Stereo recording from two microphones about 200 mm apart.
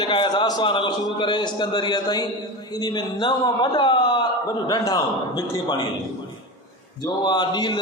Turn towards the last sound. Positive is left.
turn(degrees=20)  # may be behind; listen again after turning